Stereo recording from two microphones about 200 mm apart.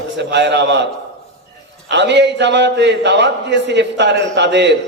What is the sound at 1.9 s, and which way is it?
A man's voice, 60° right (ahead or behind).